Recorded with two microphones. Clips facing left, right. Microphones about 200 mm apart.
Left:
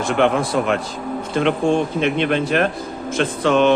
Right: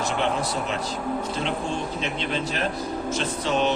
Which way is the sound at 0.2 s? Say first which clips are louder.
Left 10 dB; 60° left (ahead or behind).